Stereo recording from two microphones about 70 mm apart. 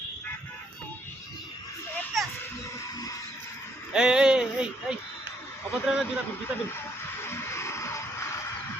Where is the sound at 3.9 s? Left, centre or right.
Centre.